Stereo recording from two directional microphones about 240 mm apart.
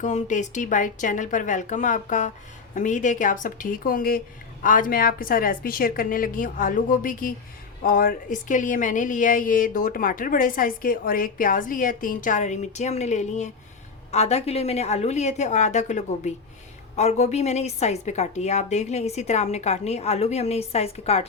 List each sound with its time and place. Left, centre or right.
0.0 s a woman's voice: left